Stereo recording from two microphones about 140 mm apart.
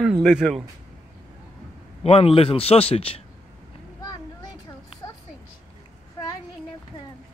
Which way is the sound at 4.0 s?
30° left (ahead or behind).